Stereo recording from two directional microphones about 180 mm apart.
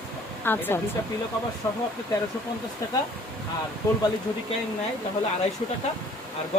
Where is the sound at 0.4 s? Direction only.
10° left (ahead or behind).